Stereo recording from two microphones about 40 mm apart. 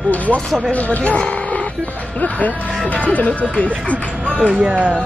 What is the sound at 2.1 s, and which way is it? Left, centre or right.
Speech, left.